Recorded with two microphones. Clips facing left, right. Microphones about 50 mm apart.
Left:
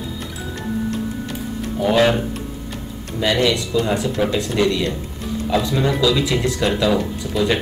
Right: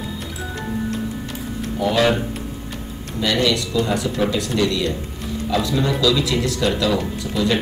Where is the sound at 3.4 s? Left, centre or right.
Left.